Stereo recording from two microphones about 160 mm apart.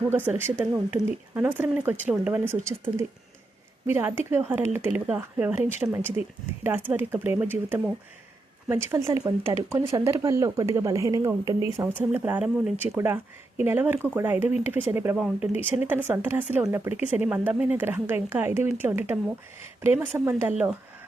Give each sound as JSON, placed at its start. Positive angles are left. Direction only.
{"t": 0.1, "sound": "speech", "side_deg": -15}
{"t": 3.8, "sound": "speech", "side_deg": -15}